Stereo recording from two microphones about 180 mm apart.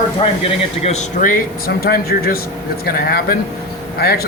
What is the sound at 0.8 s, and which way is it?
Speech, 50° left (ahead or behind).